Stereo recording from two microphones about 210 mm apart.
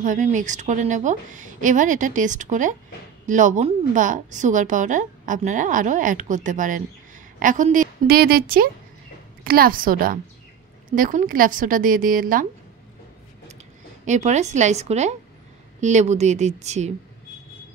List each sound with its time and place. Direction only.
0.0 s a woman's voice: 35° right (ahead or behind)
14.0 s a woman's voice: 35° right (ahead or behind)